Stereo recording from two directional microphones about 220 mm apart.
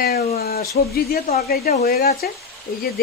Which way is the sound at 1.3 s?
45° left (ahead or behind).